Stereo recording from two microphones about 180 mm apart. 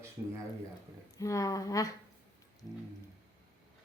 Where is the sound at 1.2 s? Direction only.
20° left (ahead or behind).